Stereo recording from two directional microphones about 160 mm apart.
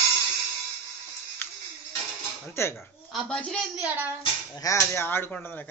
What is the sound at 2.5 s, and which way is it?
Speech, 15° left (ahead or behind).